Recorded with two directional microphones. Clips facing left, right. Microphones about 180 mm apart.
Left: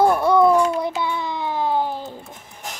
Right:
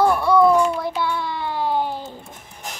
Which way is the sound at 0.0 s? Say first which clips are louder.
Even; 20° left (ahead or behind).